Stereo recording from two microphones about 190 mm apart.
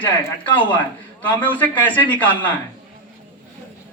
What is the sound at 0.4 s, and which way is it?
Speech, 25° left (ahead or behind).